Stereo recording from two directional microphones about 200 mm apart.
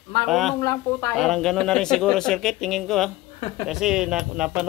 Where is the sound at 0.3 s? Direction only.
Centre (ahead or behind).